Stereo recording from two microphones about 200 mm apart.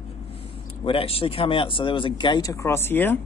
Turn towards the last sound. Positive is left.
turn(degrees=10)  # may be behind; listen again after turning